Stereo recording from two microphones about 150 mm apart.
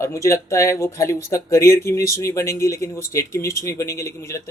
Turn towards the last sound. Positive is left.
turn(degrees=20)  # may be behind; listen again after turning